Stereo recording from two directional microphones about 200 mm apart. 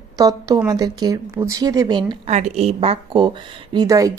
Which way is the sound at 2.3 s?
35° right (ahead or behind).